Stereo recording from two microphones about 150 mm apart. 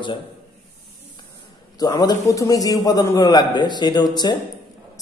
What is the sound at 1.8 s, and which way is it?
A man's voice, 25° left (ahead or behind).